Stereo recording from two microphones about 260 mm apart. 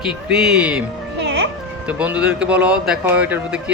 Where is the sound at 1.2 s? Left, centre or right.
Right.